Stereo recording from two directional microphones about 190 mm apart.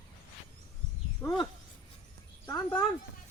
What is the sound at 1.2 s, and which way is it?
Speech, 20° left (ahead or behind).